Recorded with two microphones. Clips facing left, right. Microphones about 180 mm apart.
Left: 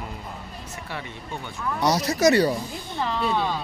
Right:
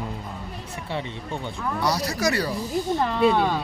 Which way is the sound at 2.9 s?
55° right (ahead or behind).